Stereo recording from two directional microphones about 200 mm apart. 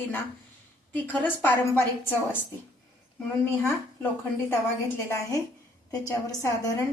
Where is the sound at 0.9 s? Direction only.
10° left (ahead or behind).